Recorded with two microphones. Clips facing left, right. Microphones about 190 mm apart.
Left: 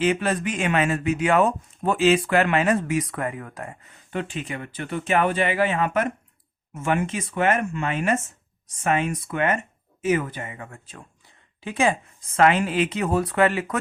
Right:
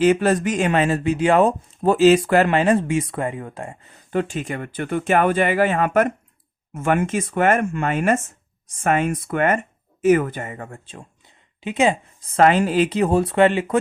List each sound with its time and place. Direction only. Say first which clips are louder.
0.0 s speech: right 6 dB; 40° right (ahead or behind)
4.1 s speech: right 6 dB; 45° right (ahead or behind)
11.6 s speech: right 3 dB; 20° right (ahead or behind)
12.2 s speech: right 3 dB; 35° right (ahead or behind)